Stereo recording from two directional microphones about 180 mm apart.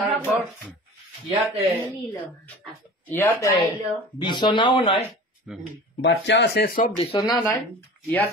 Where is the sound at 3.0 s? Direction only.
10° left (ahead or behind).